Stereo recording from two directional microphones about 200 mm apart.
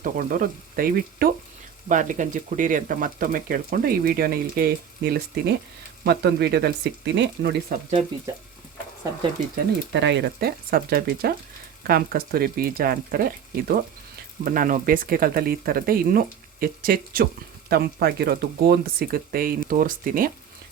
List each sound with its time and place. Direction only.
0.0 s speech: 45° right (ahead or behind)
9.9 s speech: 60° right (ahead or behind); by 20.3 s 45° right (ahead or behind)